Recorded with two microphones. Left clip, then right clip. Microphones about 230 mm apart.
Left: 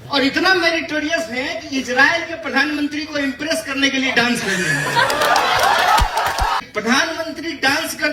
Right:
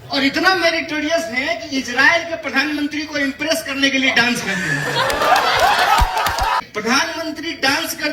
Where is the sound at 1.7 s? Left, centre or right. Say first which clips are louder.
Even; centre.